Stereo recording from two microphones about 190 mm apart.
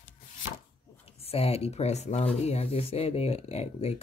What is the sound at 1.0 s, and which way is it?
Speech, 30° left (ahead or behind).